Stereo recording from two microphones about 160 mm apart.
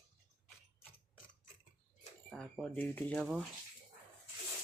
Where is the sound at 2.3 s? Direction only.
5° left (ahead or behind).